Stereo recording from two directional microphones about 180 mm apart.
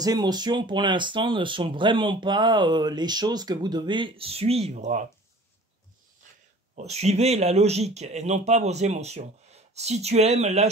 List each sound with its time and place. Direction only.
0.0 s speech: 20° right (ahead or behind); by 5.0 s 40° right (ahead or behind)
6.7 s speech: 35° right (ahead or behind)